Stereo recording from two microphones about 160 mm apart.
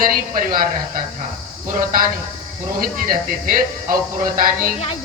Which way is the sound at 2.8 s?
60° right (ahead or behind).